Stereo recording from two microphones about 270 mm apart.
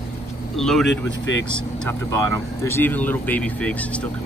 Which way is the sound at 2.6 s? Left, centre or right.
Centre.